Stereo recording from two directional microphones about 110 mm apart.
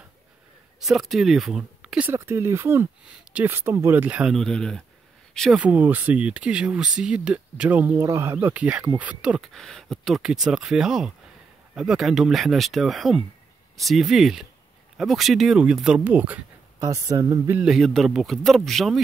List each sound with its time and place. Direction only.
0.7 s speech: 5° right (ahead or behind)
2.1 s speech: 25° right (ahead or behind)
4.3 s speech: 5° left (ahead or behind)
5.6 s speech: 15° right (ahead or behind)
7.9 s speech: 30° right (ahead or behind); by 9.5 s 10° right (ahead or behind)
9.5 s speech: 5° left (ahead or behind); by 16.3 s 15° right (ahead or behind)
16.8 s speech: 30° right (ahead or behind)
17.6 s speech: 5° right (ahead or behind)